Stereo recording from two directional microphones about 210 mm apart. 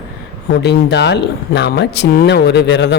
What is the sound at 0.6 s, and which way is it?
Speech, 55° left (ahead or behind).